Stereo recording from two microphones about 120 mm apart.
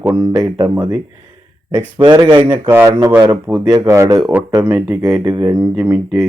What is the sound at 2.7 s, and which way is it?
Speech, 20° right (ahead or behind).